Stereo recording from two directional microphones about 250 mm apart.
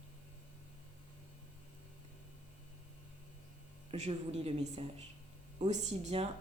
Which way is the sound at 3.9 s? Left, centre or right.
Right.